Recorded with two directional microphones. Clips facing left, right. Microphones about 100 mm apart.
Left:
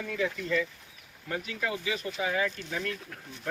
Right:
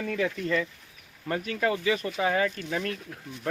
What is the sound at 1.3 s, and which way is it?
Speech, 55° right (ahead or behind).